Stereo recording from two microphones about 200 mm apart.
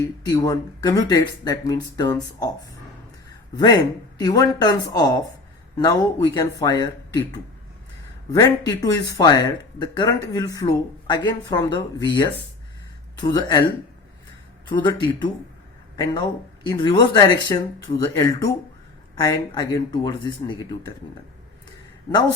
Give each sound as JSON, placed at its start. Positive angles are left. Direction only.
{"t": 0.0, "sound": "speech", "side_deg": 15}
{"t": 3.5, "sound": "speech", "side_deg": 20}
{"t": 14.7, "sound": "speech", "side_deg": 25}
{"t": 16.6, "sound": "speech", "side_deg": 20}